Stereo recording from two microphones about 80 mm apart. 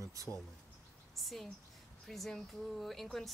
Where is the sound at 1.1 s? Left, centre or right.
Centre.